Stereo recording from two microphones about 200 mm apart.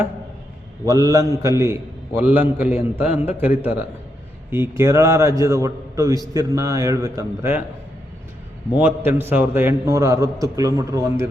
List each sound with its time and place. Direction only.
0.9 s a man's voice: 15° right (ahead or behind)
8.7 s a man's voice: 10° right (ahead or behind)